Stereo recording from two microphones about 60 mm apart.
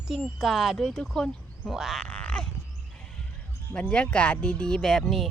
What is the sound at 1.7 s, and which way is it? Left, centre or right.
Speech, centre.